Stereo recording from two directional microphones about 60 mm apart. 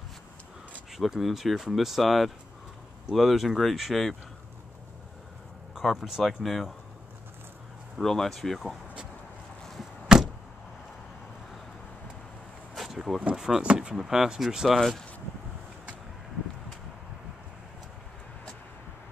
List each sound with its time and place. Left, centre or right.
0.9 s speech: centre
5.8 s speech: centre
8.0 s speech: centre
9.8 s a sound: centre
12.7 s a sound: centre
13.6 s speech: centre
13.9 s speech: centre